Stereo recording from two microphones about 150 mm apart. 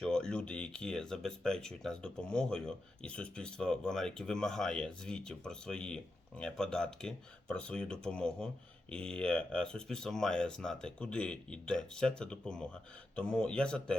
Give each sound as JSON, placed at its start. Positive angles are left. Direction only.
{"t": 0.0, "sound": "speech", "side_deg": 5}